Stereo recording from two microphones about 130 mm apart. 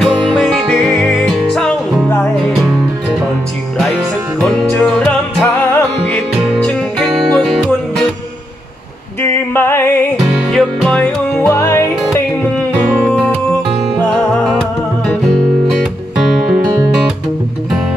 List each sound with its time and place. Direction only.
0.0 s music: centre (ahead or behind)
4.4 s music: 5° left (ahead or behind)
9.2 s music: 15° left (ahead or behind)
10.5 s music: 5° left (ahead or behind)
11.5 s music: 25° left (ahead or behind)
13.0 s music: 5° left (ahead or behind)
15.8 s music: centre (ahead or behind)
16.5 s music: 20° right (ahead or behind)